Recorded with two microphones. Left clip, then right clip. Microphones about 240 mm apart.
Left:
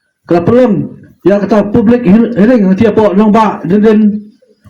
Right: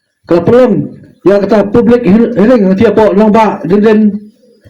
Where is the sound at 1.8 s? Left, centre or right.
Left.